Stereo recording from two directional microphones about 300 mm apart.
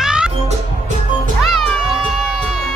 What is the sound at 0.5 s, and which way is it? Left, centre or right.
Music, right.